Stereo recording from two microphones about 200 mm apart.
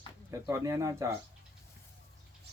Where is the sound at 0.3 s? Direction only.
15° right (ahead or behind).